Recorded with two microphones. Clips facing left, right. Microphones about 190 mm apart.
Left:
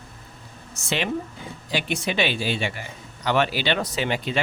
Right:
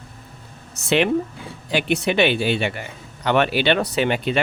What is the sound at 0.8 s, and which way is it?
Speech, 60° right (ahead or behind).